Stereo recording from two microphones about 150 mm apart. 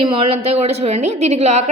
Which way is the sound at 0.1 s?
40° right (ahead or behind).